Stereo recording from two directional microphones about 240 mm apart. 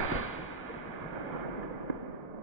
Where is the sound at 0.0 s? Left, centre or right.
Left.